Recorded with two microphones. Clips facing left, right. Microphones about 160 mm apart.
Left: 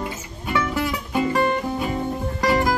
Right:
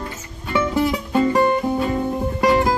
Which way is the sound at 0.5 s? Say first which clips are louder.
Right 4 dB; 25° right (ahead or behind).